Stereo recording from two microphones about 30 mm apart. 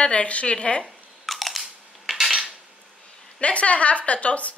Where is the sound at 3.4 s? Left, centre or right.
Left.